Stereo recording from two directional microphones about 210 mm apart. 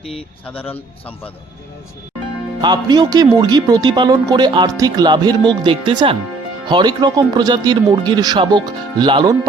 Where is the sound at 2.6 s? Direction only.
20° right (ahead or behind).